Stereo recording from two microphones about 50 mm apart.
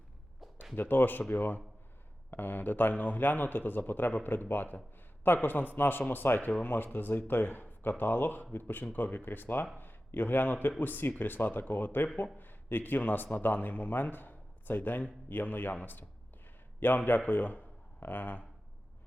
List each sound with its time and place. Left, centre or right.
0.8 s a man's voice: left